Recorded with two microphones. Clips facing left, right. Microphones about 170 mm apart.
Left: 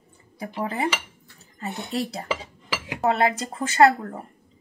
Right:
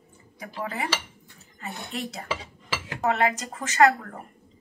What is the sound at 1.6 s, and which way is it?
Speech, 35° left (ahead or behind).